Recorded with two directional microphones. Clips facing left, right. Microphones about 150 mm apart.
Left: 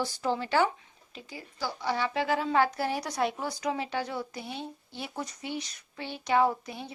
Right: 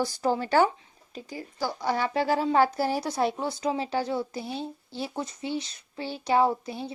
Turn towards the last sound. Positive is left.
turn(degrees=-30)  # may be behind; listen again after turning